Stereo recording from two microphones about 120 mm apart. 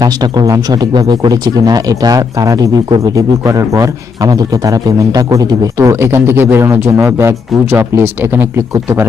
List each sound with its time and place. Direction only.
0.0 s speech: 35° right (ahead or behind)